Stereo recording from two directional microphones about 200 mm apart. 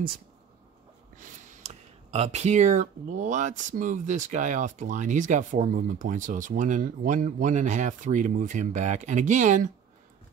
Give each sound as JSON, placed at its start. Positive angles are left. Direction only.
{"t": 1.6, "sound": "speech", "side_deg": -35}